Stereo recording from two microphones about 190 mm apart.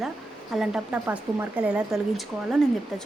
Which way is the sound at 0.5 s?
5° right (ahead or behind).